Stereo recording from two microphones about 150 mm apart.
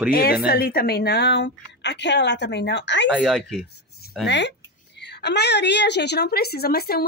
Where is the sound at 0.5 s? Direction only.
90° left.